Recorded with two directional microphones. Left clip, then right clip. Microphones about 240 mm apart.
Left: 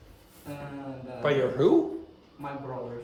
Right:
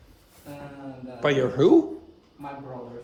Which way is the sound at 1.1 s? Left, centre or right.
Right.